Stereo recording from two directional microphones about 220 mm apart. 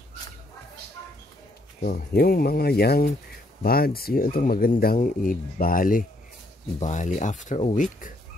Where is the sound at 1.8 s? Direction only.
45° left (ahead or behind).